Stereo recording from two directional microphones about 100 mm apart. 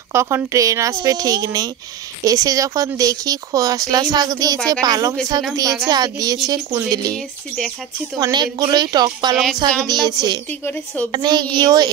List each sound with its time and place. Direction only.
0.1 s speech: 30° right (ahead or behind)
8.2 s a woman's voice: 45° right (ahead or behind)
10.6 s speech: 15° left (ahead or behind)
11.1 s a woman's voice: 45° right (ahead or behind)